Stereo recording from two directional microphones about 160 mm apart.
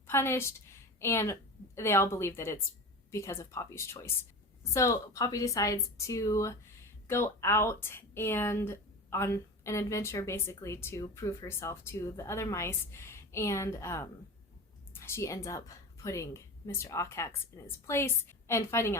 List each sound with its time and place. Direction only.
0.1 s a woman's voice: 15° left (ahead or behind)